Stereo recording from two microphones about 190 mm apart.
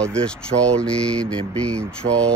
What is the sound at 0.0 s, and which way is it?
Speech, 5° left (ahead or behind).